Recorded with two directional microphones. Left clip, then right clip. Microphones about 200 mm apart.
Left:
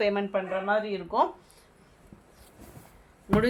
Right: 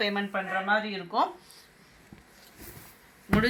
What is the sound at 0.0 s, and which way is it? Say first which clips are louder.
Speech: left 3 dB; 55° left (ahead or behind).